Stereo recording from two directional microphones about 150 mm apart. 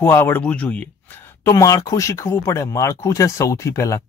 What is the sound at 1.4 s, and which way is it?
Speech, 20° left (ahead or behind).